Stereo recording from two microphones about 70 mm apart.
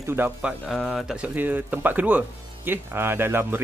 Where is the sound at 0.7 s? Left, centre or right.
Centre.